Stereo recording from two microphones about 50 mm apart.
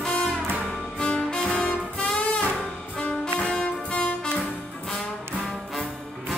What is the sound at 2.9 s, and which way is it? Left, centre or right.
Music, left.